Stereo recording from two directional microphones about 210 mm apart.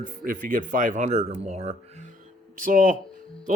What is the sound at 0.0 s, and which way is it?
A man's voice, 40° right (ahead or behind).